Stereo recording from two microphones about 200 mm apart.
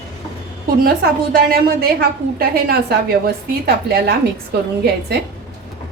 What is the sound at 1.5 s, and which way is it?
A woman's voice, 50° right (ahead or behind).